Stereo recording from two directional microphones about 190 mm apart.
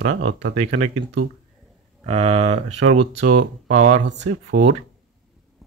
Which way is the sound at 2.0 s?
30° right (ahead or behind).